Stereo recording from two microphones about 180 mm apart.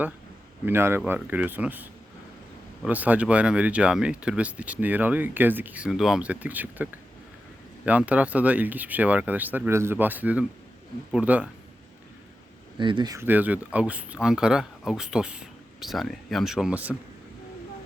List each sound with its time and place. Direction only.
0.6 s speech: 15° right (ahead or behind)
7.9 s speech: 10° right (ahead or behind)
12.7 s speech: 25° right (ahead or behind)
13.2 s speech: 10° right (ahead or behind)